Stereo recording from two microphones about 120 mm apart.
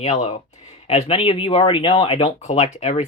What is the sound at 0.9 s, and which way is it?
Speech, 55° left (ahead or behind).